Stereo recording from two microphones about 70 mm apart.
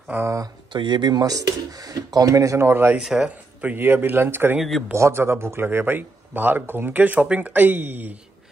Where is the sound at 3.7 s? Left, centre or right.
Right.